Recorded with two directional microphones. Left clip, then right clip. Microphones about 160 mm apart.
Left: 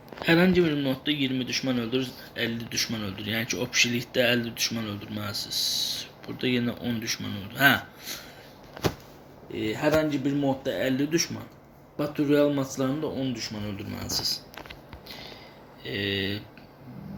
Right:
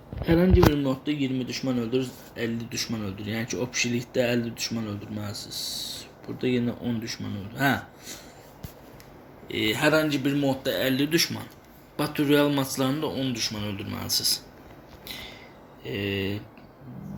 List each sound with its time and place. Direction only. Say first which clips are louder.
0.3 s speech: right 1 dB; centre (ahead or behind)
9.5 s speech: right 5 dB; 20° right (ahead or behind)
10.0 s speech: right 1 dB; 10° left (ahead or behind)
15.8 s speech: left 1 dB; 5° right (ahead or behind)